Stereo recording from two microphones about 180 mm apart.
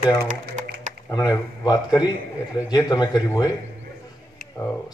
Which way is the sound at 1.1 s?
20° left (ahead or behind).